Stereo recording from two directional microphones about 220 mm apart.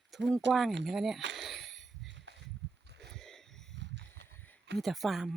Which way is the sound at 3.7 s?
50° right (ahead or behind).